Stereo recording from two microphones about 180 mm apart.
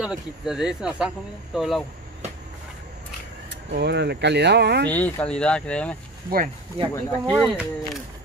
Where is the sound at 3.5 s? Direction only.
65° right (ahead or behind).